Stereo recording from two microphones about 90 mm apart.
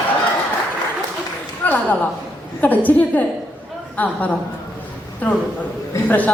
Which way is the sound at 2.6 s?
20° left (ahead or behind).